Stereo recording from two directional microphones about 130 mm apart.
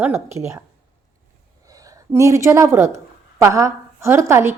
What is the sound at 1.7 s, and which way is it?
A woman's voice, 25° right (ahead or behind).